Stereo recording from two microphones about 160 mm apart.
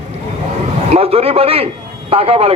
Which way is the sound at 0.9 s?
40° right (ahead or behind).